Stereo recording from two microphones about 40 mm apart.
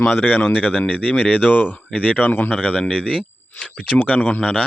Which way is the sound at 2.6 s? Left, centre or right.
Left.